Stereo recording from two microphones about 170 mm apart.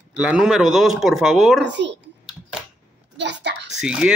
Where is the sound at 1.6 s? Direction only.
90° right.